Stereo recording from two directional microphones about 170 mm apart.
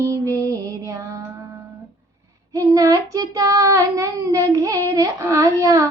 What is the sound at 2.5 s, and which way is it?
Child singing, 20° right (ahead or behind).